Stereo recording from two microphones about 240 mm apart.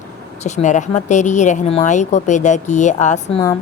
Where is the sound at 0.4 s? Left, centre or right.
Left.